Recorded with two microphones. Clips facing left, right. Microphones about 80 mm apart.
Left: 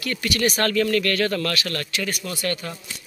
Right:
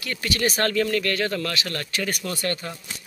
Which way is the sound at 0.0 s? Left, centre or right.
Right.